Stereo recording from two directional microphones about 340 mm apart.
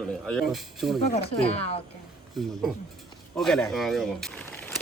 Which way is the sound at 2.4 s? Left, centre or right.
Centre.